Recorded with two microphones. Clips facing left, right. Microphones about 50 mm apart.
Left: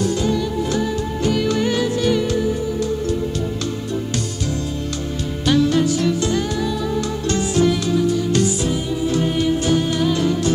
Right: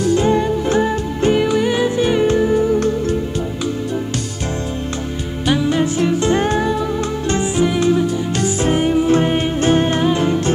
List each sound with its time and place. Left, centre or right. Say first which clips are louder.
0.1 s music: right 5 dB; right
1.5 s music: right 3 dB; centre
5.5 s music: even; centre; by 6.8 s right
7.2 s music: even; right